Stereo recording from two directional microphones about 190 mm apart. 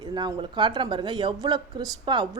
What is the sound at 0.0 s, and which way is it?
Speech, 20° right (ahead or behind).